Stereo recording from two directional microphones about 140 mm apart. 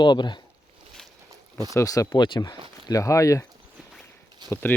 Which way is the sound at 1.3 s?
25° right (ahead or behind).